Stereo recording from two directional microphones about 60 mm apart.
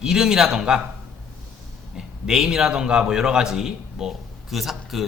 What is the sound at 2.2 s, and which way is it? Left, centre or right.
A man's voice, centre.